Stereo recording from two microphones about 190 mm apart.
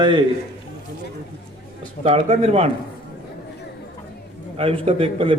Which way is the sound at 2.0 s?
35° right (ahead or behind).